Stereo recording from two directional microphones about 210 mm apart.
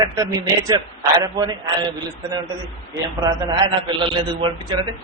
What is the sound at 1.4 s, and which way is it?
Speech, 15° right (ahead or behind).